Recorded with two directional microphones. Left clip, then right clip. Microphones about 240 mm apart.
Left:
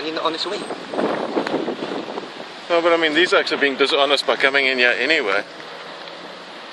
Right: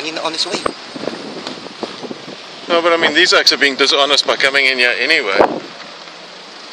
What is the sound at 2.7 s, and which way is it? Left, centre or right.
Speech, centre.